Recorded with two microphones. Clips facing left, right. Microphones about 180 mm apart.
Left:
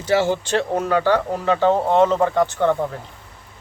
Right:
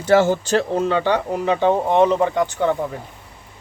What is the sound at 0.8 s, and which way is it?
Speech, 25° right (ahead or behind).